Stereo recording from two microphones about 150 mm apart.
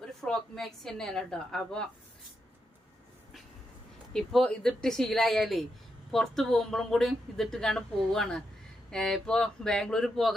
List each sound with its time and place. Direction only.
0.0 s speech: 5° left (ahead or behind)
4.1 s speech: 5° left (ahead or behind)